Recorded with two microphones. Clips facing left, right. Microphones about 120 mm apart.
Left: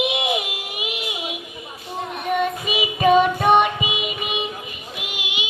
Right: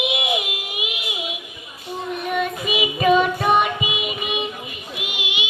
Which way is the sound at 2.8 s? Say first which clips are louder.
Left 1 dB; 40° left (ahead or behind).